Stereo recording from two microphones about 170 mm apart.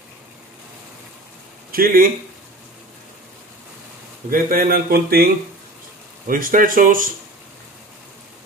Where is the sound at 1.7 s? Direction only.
60° right (ahead or behind).